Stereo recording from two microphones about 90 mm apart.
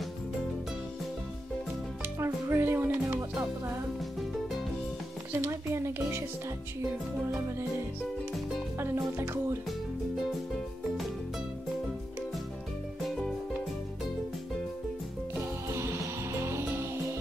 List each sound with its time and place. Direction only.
2.1 s music: 30° right (ahead or behind)
5.3 s speech: 30° right (ahead or behind)
8.7 s speech: 30° right (ahead or behind)
9.7 s music: centre (ahead or behind)
13.0 s music: centre (ahead or behind)
15.7 s music: 30° right (ahead or behind)